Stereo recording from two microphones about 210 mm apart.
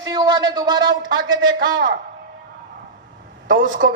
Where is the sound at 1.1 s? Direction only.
60° right (ahead or behind).